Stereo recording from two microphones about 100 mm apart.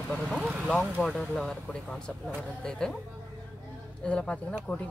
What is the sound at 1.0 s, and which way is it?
Speech, 5° left (ahead or behind).